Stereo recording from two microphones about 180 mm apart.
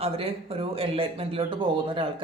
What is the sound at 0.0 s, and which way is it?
Speech, 35° right (ahead or behind).